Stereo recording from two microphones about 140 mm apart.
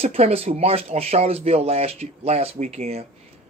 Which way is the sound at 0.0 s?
45° right (ahead or behind).